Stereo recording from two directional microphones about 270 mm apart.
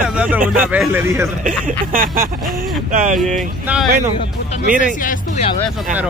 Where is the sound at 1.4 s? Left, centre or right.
Right.